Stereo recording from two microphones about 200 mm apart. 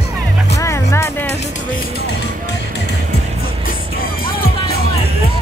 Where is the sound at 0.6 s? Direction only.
15° left (ahead or behind).